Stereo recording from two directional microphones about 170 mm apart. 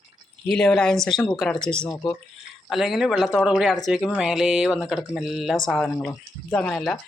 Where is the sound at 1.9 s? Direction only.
20° left (ahead or behind).